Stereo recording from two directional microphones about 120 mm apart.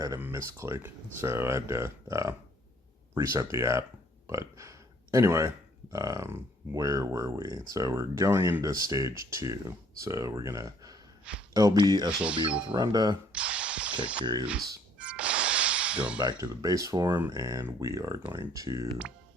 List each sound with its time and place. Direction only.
0.2 s speech: 20° right (ahead or behind)
4.3 s burping: 25° right (ahead or behind)
5.1 s speech: 25° right (ahead or behind)
12.0 s speech: 10° right (ahead or behind)
12.7 s speech: 35° right (ahead or behind)
13.3 s a sound: 10° right (ahead or behind)
14.0 s speech: 10° right (ahead or behind)
14.9 s music: 10° right (ahead or behind)
16.1 s speech: 35° right (ahead or behind)